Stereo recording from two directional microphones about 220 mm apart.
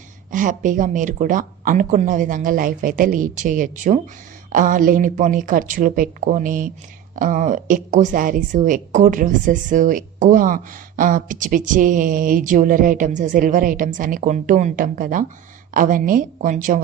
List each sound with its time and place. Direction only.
0.3 s a woman's voice: 35° right (ahead or behind)